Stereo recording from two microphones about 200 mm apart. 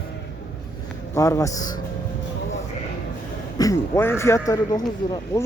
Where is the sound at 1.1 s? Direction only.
15° left (ahead or behind).